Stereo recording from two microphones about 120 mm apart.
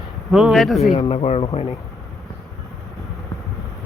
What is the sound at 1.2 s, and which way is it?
Speech, 55° left (ahead or behind).